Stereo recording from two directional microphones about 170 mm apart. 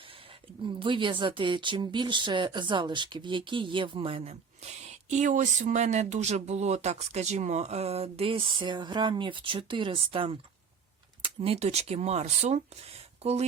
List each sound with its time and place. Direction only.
0.8 s speech: 30° right (ahead or behind)